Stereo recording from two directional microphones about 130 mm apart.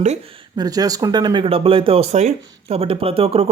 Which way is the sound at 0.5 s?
30° right (ahead or behind).